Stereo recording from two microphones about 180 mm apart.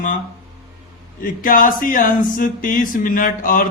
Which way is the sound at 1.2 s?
50° left (ahead or behind).